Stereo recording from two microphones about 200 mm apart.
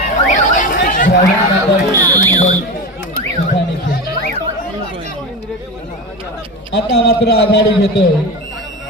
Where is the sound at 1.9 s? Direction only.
15° right (ahead or behind).